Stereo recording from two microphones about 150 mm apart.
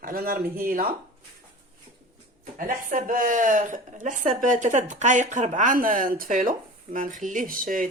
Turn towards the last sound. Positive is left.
turn(degrees=-65)  # may be behind; listen again after turning